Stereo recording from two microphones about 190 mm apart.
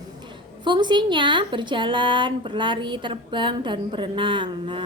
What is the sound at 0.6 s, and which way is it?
Speech, 25° right (ahead or behind).